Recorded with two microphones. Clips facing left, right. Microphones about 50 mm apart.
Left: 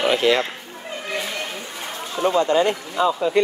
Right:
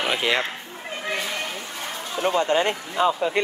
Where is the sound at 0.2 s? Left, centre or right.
Centre.